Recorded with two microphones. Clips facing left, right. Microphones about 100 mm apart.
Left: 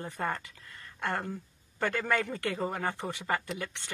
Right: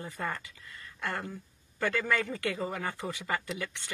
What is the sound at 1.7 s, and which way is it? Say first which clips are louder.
Speech: even; 35° left (ahead or behind).